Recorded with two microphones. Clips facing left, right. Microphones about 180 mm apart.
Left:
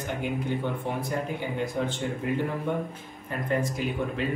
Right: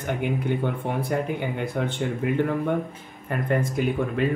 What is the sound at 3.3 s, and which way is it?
Speech, 55° right (ahead or behind).